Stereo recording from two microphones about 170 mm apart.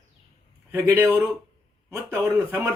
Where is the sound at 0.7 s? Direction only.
15° right (ahead or behind).